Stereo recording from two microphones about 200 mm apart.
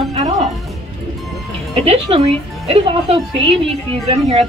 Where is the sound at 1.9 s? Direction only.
30° right (ahead or behind).